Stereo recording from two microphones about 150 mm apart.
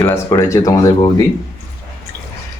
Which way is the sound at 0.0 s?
15° left (ahead or behind).